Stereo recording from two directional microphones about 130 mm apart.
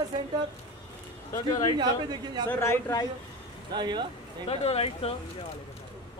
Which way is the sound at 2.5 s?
20° left (ahead or behind).